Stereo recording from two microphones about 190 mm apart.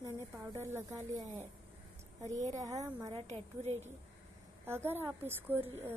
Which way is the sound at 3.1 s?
35° right (ahead or behind).